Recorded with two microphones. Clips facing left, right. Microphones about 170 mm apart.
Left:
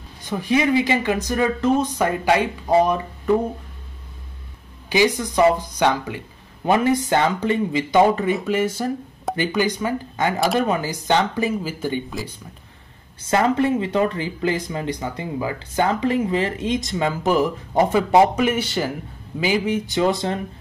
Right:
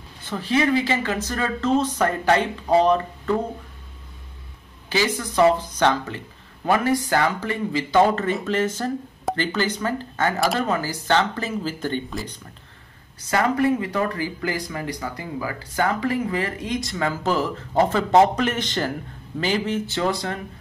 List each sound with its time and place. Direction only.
0.2 s speech: 15° left (ahead or behind)
4.8 s speech: 15° left (ahead or behind)
13.3 s speech: 25° left (ahead or behind)